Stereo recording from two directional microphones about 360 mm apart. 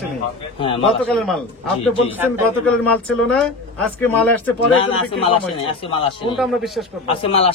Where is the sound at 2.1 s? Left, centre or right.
Centre.